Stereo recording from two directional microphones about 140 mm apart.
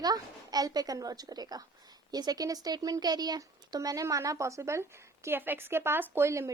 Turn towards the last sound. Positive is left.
turn(degrees=-20)  # may be behind; listen again after turning